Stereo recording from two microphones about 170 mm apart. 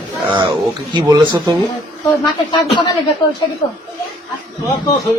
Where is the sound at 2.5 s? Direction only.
30° left (ahead or behind).